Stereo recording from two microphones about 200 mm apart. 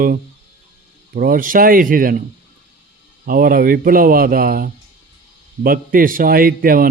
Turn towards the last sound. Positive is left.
turn(degrees=-45)  # may be behind; listen again after turning